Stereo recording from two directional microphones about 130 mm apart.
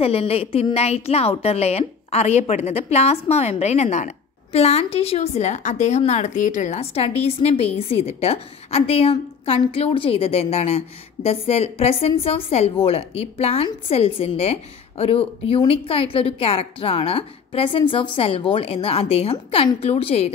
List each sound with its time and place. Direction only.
0.0 s a woman's voice: 50° left (ahead or behind)